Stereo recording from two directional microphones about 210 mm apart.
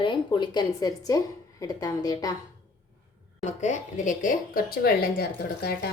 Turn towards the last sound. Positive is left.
turn(degrees=50)  # may be behind; listen again after turning